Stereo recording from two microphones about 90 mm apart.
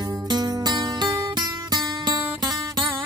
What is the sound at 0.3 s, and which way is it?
Music, 50° right (ahead or behind).